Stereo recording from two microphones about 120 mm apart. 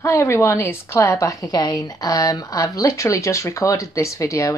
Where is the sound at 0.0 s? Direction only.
20° left (ahead or behind).